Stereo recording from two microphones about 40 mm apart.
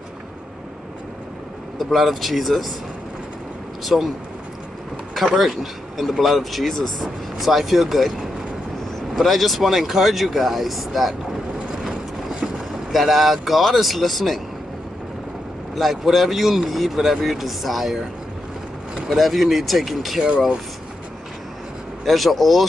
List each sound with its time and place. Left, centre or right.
1.8 s speech: centre
3.8 s speech: centre
5.1 s speech: centre
11.7 s vehicle: centre
12.9 s speech: centre
15.7 s speech: centre
19.0 s speech: centre
20.2 s speech: centre
22.0 s speech: centre